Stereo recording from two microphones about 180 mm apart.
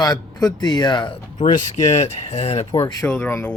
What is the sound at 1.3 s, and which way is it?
Speech, 45° left (ahead or behind).